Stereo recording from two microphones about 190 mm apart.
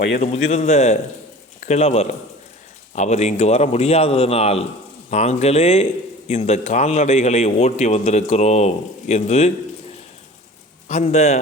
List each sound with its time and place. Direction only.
0.2 s a man's voice: 35° left (ahead or behind)
10.8 s a man's voice: 35° left (ahead or behind)